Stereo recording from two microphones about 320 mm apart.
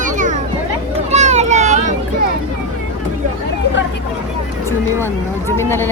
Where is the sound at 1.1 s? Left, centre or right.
Right.